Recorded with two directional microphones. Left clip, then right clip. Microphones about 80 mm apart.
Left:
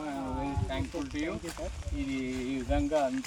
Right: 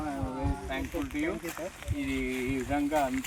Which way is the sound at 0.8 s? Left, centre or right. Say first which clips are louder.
Right 2 dB; right.